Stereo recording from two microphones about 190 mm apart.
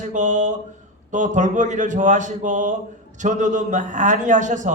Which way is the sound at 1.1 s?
40° right (ahead or behind).